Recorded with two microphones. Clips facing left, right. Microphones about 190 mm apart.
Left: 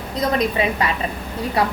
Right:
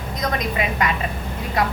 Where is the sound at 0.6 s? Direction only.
30° left (ahead or behind).